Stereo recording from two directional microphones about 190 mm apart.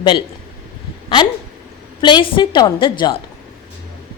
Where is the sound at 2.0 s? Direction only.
25° left (ahead or behind).